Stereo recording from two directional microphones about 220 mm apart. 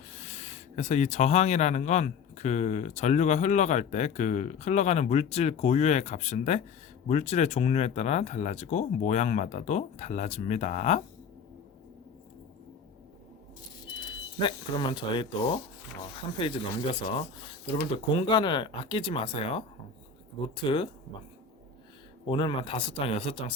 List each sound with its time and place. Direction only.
0.3 s speech: 30° left (ahead or behind)
14.4 s speech: 20° left (ahead or behind)
20.7 s speech: 20° left (ahead or behind)
22.3 s speech: 25° left (ahead or behind)